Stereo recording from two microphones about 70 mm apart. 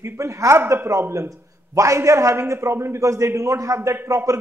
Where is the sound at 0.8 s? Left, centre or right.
Right.